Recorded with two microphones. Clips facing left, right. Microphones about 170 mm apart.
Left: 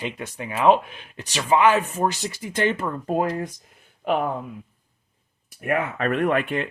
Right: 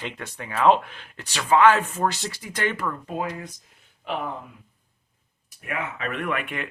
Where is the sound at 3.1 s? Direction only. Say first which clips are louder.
Left 7 dB; 45° left (ahead or behind).